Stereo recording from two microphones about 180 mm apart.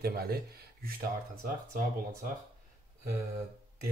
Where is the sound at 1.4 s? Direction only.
50° right (ahead or behind).